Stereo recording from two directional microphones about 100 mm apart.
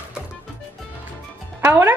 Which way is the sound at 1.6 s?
25° right (ahead or behind).